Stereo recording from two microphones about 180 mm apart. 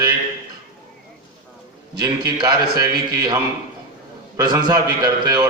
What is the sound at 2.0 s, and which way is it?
A man's voice, 25° right (ahead or behind).